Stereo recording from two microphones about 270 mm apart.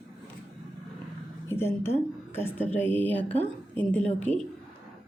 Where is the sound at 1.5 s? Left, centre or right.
Centre.